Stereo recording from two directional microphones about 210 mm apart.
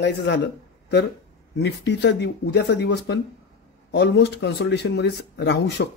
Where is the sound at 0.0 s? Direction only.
55° left (ahead or behind).